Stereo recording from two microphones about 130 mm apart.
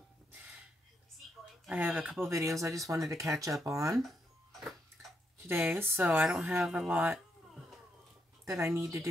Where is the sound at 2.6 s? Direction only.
25° right (ahead or behind).